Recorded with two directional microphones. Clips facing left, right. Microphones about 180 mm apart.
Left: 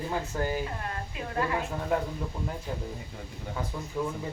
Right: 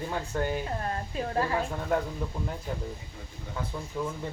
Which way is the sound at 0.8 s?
35° right (ahead or behind).